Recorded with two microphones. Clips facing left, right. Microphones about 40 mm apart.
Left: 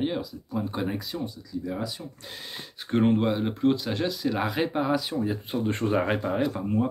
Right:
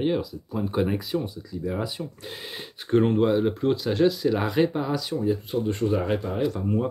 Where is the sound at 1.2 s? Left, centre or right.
Centre.